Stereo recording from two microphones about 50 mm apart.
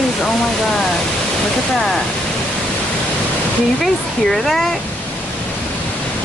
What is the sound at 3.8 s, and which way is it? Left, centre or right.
Speech, centre.